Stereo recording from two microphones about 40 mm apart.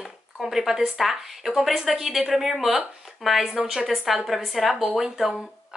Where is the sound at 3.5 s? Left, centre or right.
Centre.